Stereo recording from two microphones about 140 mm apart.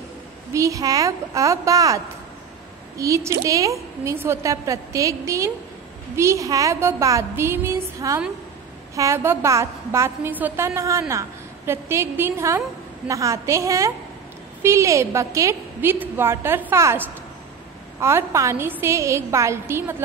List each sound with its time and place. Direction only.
0.5 s a woman's voice: 20° right (ahead or behind)
3.0 s a woman's voice: 20° right (ahead or behind)